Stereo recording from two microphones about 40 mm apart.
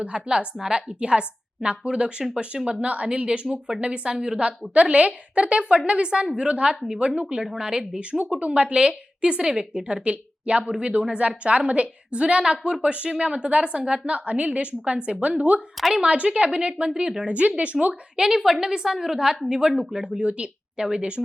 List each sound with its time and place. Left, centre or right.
0.1 s a woman's voice: right
3.8 s a woman's voice: right
8.4 s a woman's voice: right
16.9 s a woman's voice: centre
17.2 s a woman's voice: right
18.2 s a woman's voice: centre
19.7 s speech: centre
20.0 s a woman's voice: right